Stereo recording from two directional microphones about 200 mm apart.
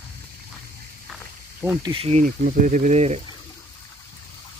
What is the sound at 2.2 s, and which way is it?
Speech, 40° right (ahead or behind).